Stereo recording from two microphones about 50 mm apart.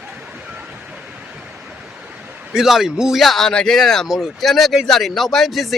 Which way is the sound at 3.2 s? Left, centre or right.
Centre.